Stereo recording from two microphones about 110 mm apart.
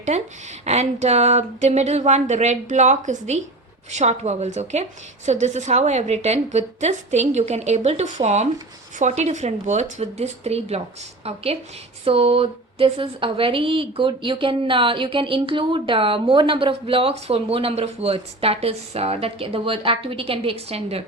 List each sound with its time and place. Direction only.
0.1 s a woman's voice: 80° right
10.0 s speech: 75° right (ahead or behind)
12.0 s a woman's voice: 65° right (ahead or behind)